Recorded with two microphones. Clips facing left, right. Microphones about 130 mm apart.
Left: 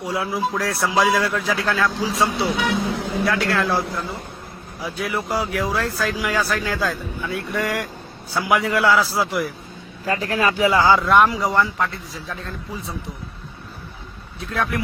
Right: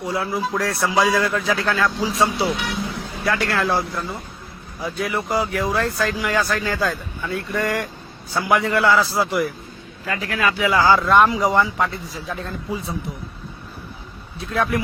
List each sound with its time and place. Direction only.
0.0 s speech: 5° left (ahead or behind)
2.9 s vehicle: 90° left
3.2 s speech: centre (ahead or behind)
10.1 s speech: 35° left (ahead or behind)
11.0 s speech: centre (ahead or behind)
14.5 s speech: centre (ahead or behind)